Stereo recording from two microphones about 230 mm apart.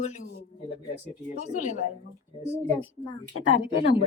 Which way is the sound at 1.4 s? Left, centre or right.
Left.